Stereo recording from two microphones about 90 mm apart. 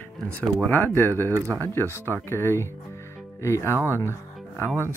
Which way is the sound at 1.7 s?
25° left (ahead or behind).